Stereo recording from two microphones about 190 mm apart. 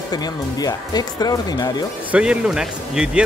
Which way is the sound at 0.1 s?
20° left (ahead or behind).